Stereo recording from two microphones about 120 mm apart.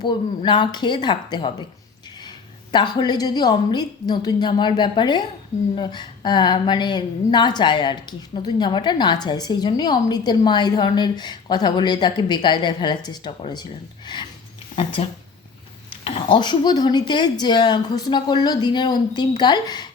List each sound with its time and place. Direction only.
0.0 s a woman's voice: 40° left (ahead or behind)
2.7 s a woman's voice: 35° left (ahead or behind)
15.0 s speech: 55° left (ahead or behind)
16.0 s a woman's voice: 45° left (ahead or behind)